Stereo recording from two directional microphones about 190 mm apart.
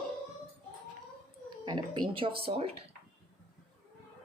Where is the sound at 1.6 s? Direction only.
25° right (ahead or behind).